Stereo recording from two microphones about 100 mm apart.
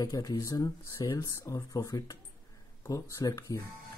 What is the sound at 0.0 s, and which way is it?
Speech, 40° left (ahead or behind).